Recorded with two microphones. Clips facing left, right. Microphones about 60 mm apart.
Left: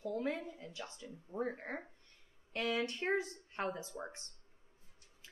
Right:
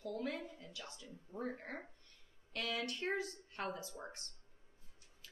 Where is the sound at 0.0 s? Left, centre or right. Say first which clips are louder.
Left 4 dB; left.